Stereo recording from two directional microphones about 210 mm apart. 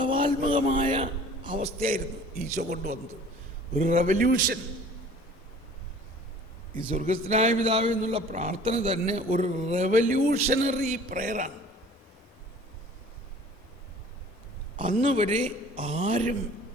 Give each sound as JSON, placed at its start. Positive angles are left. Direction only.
{"t": 0.0, "sound": "a sound", "side_deg": -25}
{"t": 0.7, "sound": "a man's voice", "side_deg": -30}
{"t": 2.6, "sound": "a man's voice", "side_deg": -45}
{"t": 6.9, "sound": "speech", "side_deg": -35}
{"t": 14.8, "sound": "speech", "side_deg": -35}